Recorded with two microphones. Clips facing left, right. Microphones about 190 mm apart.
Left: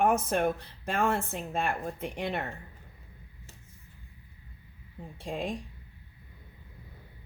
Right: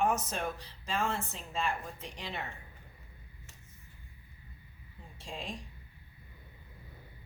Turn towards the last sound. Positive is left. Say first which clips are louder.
# left 8 dB
turn(degrees=55)  # may be behind; listen again after turning